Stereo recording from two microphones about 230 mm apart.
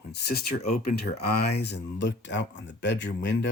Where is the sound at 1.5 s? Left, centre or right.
Left.